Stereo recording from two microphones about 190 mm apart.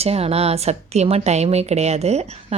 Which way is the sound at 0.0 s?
30° right (ahead or behind).